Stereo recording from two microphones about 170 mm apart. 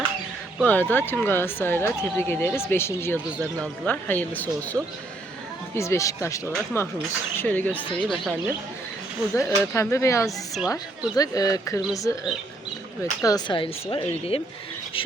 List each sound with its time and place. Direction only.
0.6 s speech: 10° left (ahead or behind)
9.3 s speech: 15° left (ahead or behind)
10.2 s a woman's voice: centre (ahead or behind)
10.7 s speech: 20° left (ahead or behind)
13.2 s speech: 25° left (ahead or behind)